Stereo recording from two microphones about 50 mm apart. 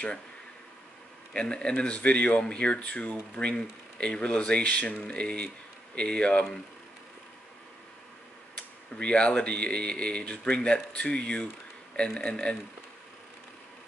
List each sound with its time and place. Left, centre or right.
1.3 s speech: centre
8.5 s speech: left